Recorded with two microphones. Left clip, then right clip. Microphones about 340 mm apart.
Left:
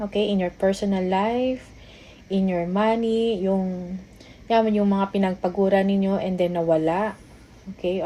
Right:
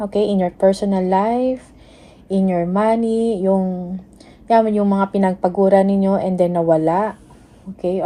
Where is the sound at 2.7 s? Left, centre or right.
Right.